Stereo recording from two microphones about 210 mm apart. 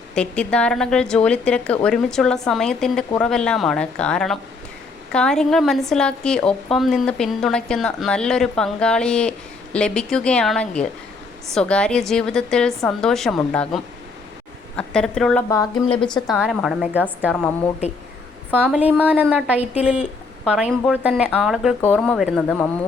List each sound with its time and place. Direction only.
0.1 s a woman's voice: 5° left (ahead or behind)
15.4 s speech: 15° left (ahead or behind)
16.3 s a woman's voice: centre (ahead or behind)
18.5 s a woman's voice: 5° right (ahead or behind)